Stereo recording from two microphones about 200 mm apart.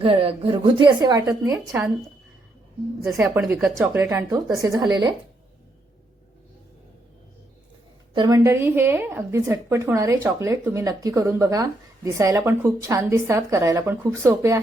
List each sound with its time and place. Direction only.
0.0 s a woman's voice: 25° right (ahead or behind); by 1.9 s 10° right (ahead or behind)
3.2 s speech: 10° right (ahead or behind)
8.1 s speech: 20° right (ahead or behind)